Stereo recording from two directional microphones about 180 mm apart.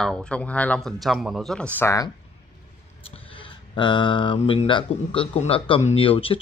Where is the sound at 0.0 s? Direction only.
5° left (ahead or behind).